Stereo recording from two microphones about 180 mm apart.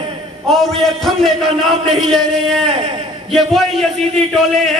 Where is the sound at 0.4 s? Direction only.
Centre (ahead or behind).